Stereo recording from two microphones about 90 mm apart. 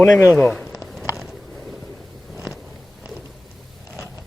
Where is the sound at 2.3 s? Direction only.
5° right (ahead or behind).